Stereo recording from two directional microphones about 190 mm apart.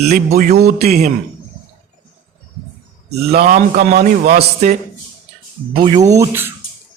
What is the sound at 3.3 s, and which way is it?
A man's voice, 50° right (ahead or behind).